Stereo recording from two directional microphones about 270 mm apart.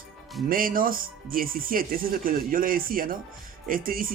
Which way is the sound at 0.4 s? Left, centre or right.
Right.